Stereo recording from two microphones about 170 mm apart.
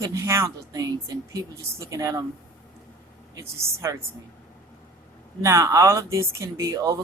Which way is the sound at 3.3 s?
15° right (ahead or behind).